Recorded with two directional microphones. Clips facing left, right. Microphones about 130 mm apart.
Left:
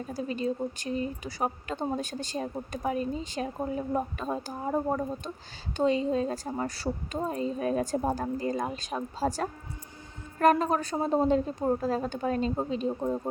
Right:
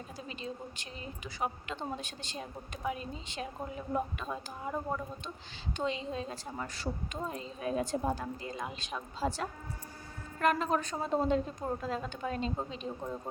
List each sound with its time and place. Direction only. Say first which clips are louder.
0.1 s speech: left 13 dB; 45° left (ahead or behind)
12.9 s speech: left 9 dB; 25° left (ahead or behind)